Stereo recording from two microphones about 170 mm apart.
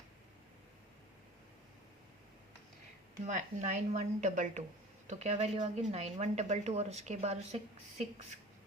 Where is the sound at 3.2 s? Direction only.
45° right (ahead or behind).